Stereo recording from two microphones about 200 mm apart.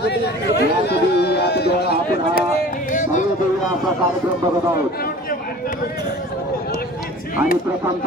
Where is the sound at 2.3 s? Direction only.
45° left (ahead or behind).